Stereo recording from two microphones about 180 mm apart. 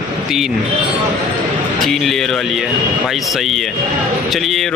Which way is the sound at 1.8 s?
Centre (ahead or behind).